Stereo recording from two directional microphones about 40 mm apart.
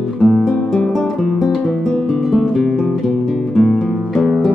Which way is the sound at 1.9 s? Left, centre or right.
Centre.